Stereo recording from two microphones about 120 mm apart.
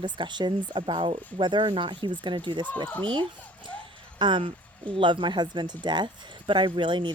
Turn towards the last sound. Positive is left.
turn(degrees=-40)  # may be behind; listen again after turning